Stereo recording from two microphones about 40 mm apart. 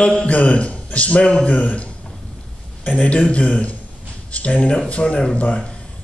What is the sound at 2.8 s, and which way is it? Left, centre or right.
Speech, left.